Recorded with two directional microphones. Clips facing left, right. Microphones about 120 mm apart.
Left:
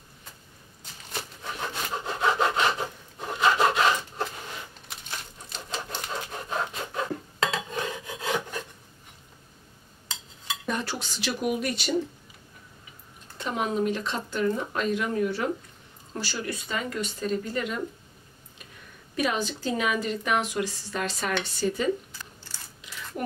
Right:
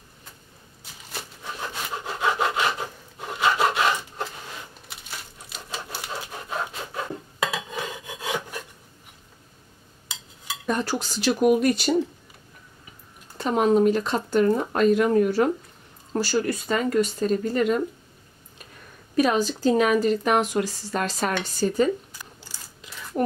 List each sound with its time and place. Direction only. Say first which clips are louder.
2.0 s wood: even; 10° right (ahead or behind)
5.5 s a sound: left 1 dB; 5° right (ahead or behind)
7.5 s filing: even; 10° right (ahead or behind)
10.0 s a sound: even; 10° right (ahead or behind)
10.7 s speech: right 6 dB; 40° right (ahead or behind)
13.4 s speech: right 8 dB; 40° right (ahead or behind)
19.1 s speech: right 6 dB; 40° right (ahead or behind)
22.2 s a sound: right 1 dB; 15° right (ahead or behind)
23.2 s speech: right 8 dB; 40° right (ahead or behind)